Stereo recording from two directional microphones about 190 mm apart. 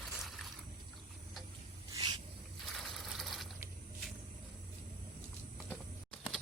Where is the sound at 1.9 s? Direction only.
20° right (ahead or behind).